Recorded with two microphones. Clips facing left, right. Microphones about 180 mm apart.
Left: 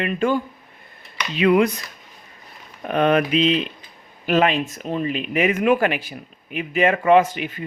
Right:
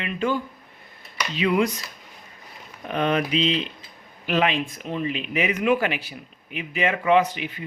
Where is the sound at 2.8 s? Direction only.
55° left (ahead or behind).